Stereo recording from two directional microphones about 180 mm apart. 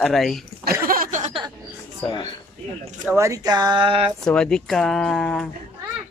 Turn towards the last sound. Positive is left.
turn(degrees=5)  # may be behind; listen again after turning